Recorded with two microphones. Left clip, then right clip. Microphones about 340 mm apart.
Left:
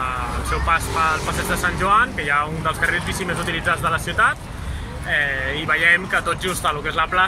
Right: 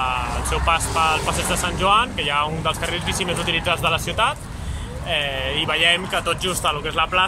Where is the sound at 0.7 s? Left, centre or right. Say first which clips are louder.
Even; centre.